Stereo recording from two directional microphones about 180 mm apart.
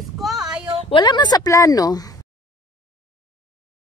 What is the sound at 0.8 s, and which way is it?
A woman's voice, 25° left (ahead or behind).